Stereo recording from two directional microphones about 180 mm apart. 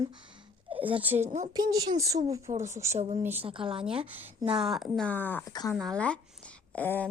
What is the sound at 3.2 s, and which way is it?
Speech, 10° right (ahead or behind).